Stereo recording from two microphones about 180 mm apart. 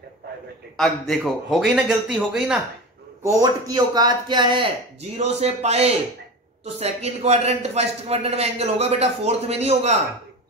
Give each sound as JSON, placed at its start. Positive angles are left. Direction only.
{"t": 0.7, "sound": "a man's voice", "side_deg": 0}
{"t": 3.2, "sound": "a man's voice", "side_deg": -20}